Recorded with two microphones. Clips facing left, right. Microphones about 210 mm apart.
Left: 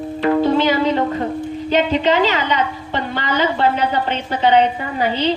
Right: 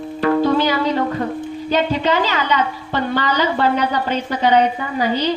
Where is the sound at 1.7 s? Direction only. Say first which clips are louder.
Left 2 dB; 20° left (ahead or behind).